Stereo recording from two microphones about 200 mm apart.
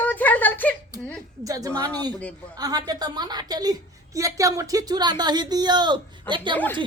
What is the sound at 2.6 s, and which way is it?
A woman's voice, 20° right (ahead or behind).